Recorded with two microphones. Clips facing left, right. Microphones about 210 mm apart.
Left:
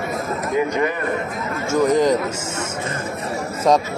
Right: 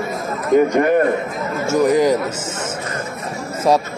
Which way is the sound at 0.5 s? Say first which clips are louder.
Right 8 dB; 55° right (ahead or behind).